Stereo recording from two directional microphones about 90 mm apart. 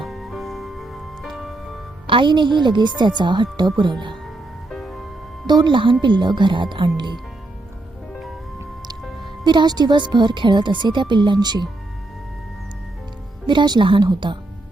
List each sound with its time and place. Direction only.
0.0 s music: centre (ahead or behind)
2.0 s speech: 65° right (ahead or behind)
4.7 s music: centre (ahead or behind)
5.5 s speech: 55° right (ahead or behind)
9.4 s speech: 55° right (ahead or behind)
13.5 s speech: 60° right (ahead or behind)